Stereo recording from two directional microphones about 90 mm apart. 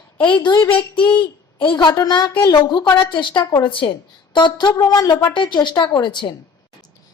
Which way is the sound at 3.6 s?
75° left (ahead or behind).